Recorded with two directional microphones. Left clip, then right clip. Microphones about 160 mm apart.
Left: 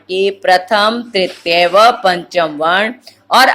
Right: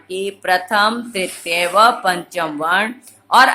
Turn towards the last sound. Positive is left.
turn(degrees=20)  # may be behind; listen again after turning